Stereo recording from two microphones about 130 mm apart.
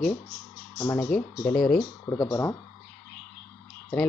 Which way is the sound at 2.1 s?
30° left (ahead or behind).